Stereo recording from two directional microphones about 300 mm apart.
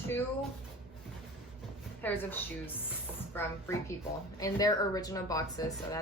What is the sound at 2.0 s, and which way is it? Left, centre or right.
A woman's voice, centre.